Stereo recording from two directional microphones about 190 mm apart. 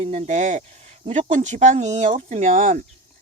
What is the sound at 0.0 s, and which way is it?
Speech, 35° right (ahead or behind).